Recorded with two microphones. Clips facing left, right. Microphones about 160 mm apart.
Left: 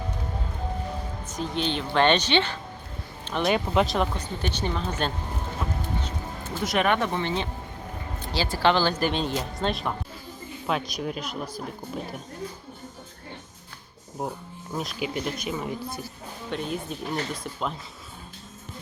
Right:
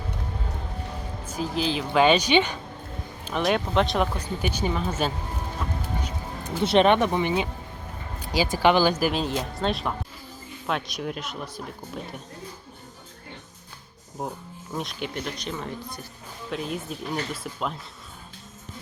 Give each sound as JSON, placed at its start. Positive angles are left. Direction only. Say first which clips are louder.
{"t": 1.2, "sound": "speech", "louder": "right 2 dB", "side_deg": -5}
{"t": 3.2, "sound": "speech", "louder": "even", "side_deg": 0}
{"t": 6.0, "sound": "music", "louder": "right 1 dB", "side_deg": -10}
{"t": 6.6, "sound": "speech", "louder": "right 5 dB", "side_deg": -25}
{"t": 14.2, "sound": "speech", "louder": "left 1 dB", "side_deg": 0}
{"t": 16.5, "sound": "speech", "louder": "even", "side_deg": 0}